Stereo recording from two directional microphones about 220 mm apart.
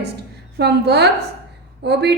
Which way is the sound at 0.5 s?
45° right (ahead or behind).